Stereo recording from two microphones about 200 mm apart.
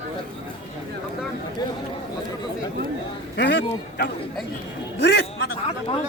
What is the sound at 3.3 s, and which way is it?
Speech, 60° left (ahead or behind).